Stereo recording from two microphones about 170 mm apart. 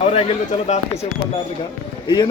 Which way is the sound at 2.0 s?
25° left (ahead or behind).